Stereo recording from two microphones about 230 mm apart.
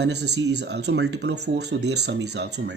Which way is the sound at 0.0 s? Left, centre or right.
Right.